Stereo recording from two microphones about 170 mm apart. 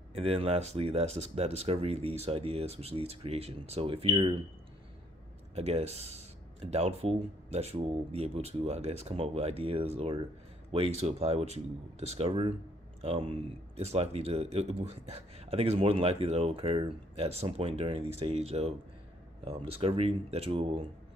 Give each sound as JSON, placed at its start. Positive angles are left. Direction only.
{"t": 0.1, "sound": "speech", "side_deg": -35}
{"t": 5.5, "sound": "speech", "side_deg": -40}